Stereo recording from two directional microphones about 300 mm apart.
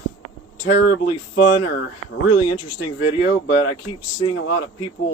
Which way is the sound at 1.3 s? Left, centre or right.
Left.